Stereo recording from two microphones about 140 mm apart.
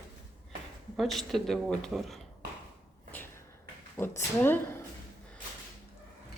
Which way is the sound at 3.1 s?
15° left (ahead or behind).